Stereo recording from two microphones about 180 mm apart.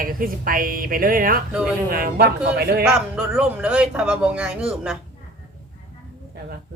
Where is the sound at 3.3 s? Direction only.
5° right (ahead or behind).